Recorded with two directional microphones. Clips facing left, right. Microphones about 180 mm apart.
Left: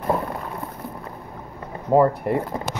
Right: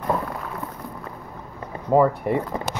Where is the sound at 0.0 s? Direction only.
25° left (ahead or behind).